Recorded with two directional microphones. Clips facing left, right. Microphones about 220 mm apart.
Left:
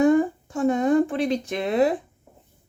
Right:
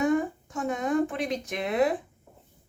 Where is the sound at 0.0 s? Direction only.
30° left (ahead or behind).